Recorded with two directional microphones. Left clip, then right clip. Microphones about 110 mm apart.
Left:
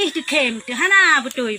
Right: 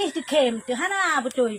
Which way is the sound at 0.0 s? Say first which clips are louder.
Left 3 dB; 40° right (ahead or behind).